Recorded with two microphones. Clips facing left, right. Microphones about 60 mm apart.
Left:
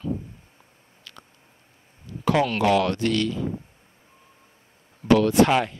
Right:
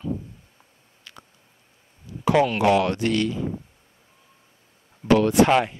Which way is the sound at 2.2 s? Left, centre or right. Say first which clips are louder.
Right 2 dB; centre.